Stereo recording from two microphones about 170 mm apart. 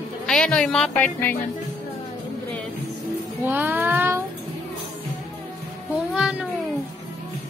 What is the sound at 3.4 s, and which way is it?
Music, 10° right (ahead or behind).